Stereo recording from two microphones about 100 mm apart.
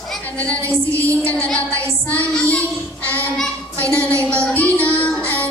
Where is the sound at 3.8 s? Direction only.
25° right (ahead or behind).